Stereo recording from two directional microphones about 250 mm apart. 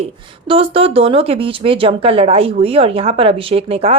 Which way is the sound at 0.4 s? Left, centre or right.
Right.